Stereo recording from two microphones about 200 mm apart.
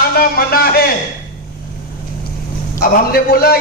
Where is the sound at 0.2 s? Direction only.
50° left (ahead or behind).